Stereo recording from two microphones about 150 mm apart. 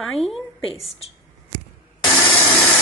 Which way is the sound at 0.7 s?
40° left (ahead or behind).